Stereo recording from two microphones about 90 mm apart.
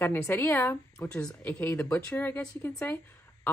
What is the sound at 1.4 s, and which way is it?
Speech, 20° left (ahead or behind).